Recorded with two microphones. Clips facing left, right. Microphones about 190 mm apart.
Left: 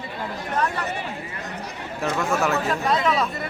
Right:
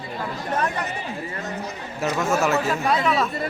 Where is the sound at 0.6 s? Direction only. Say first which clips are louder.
Even; 20° right (ahead or behind).